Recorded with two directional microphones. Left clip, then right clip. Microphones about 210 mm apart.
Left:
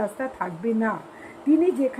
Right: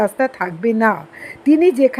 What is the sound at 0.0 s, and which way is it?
A woman's voice, 30° right (ahead or behind).